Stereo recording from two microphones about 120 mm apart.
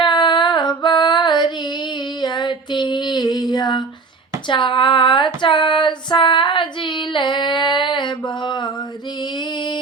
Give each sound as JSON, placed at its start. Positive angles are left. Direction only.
{"t": 0.0, "sound": "female singing", "side_deg": 40}